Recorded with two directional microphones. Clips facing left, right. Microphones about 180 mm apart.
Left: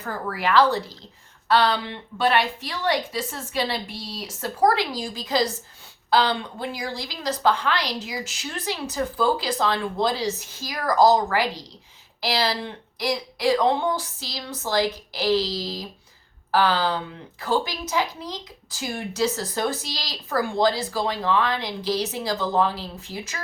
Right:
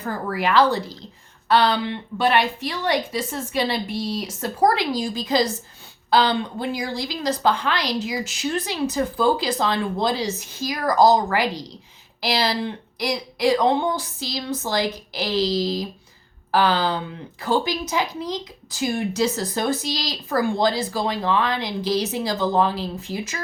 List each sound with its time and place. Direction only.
0.0 s a woman's voice: 20° right (ahead or behind)